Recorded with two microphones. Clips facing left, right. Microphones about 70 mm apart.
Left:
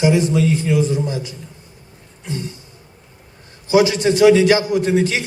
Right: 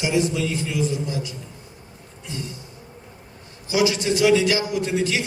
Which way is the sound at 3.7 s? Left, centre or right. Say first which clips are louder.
Left 6 dB; left.